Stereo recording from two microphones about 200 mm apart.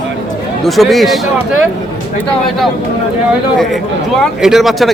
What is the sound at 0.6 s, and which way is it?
Speech, centre (ahead or behind).